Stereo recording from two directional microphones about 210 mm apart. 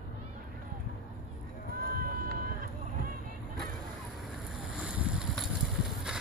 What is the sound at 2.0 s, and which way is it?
Run, 45° right (ahead or behind).